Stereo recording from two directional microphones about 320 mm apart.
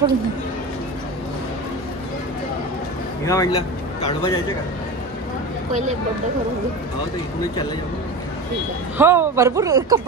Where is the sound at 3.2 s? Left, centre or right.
Centre.